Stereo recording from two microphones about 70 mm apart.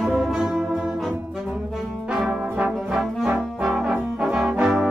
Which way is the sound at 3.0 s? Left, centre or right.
Centre.